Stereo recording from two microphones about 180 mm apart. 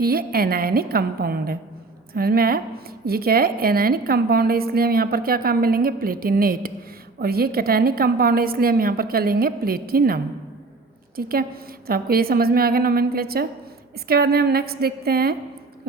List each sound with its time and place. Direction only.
0.0 s a woman's voice: 55° right (ahead or behind)
11.2 s a woman's voice: 55° right (ahead or behind)